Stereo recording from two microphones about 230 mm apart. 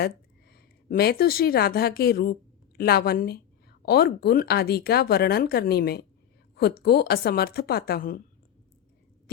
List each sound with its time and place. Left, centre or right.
0.5 s a woman's voice: left